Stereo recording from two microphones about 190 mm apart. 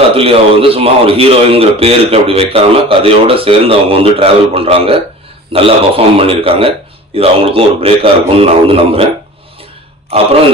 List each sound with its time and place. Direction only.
0.1 s a man's voice: 30° right (ahead or behind)